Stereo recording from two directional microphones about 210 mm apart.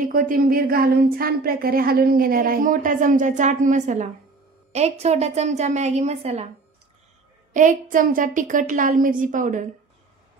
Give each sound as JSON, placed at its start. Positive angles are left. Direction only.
{"t": 0.0, "sound": "a woman's voice", "side_deg": -40}
{"t": 7.5, "sound": "a woman's voice", "side_deg": -40}